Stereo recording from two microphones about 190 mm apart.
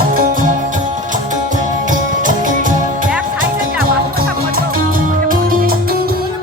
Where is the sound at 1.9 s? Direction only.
45° right (ahead or behind).